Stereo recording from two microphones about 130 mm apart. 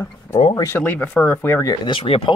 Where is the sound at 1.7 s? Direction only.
40° left (ahead or behind).